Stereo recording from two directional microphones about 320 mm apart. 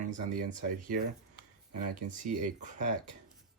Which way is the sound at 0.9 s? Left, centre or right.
Right.